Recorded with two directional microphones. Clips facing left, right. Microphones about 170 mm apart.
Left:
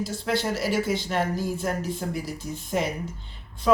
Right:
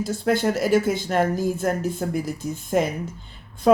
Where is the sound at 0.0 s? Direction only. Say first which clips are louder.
Right 5 dB; 50° right (ahead or behind).